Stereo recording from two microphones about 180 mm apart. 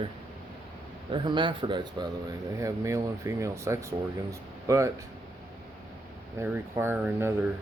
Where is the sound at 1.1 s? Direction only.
25° right (ahead or behind).